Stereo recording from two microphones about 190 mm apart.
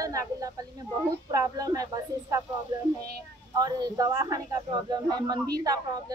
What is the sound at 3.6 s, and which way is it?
Speech, 20° right (ahead or behind).